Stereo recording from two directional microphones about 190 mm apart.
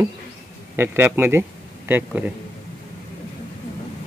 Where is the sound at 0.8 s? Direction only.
10° right (ahead or behind).